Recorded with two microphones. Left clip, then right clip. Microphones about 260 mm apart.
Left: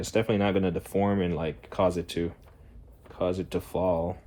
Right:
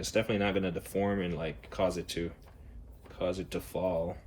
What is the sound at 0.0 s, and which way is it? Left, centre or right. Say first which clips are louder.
Speech: left 4 dB; left.